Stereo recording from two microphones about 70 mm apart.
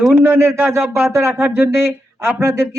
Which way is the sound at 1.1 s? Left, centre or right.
Right.